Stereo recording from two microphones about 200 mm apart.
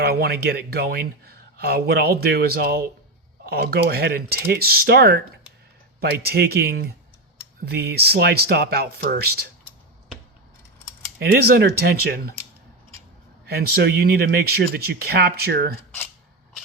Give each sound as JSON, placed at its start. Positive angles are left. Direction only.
{"t": 0.0, "sound": "speech", "side_deg": -50}
{"t": 11.2, "sound": "speech", "side_deg": -50}
{"t": 13.5, "sound": "speech", "side_deg": -50}